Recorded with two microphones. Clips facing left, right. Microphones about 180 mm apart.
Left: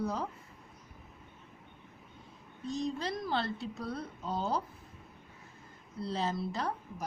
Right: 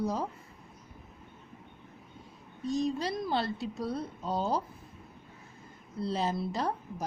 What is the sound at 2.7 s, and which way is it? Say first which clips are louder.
A woman's voice: right 4 dB; 15° right (ahead or behind).